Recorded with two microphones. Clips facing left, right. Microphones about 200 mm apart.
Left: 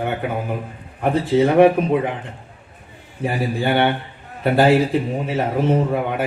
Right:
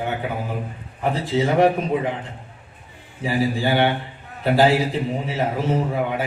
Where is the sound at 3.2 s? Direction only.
60° left (ahead or behind).